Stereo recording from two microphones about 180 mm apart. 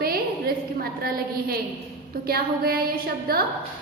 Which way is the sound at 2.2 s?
60° right (ahead or behind).